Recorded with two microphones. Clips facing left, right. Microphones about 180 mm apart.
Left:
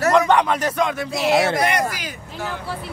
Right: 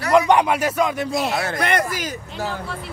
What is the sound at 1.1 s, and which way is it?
Speech, 90° left.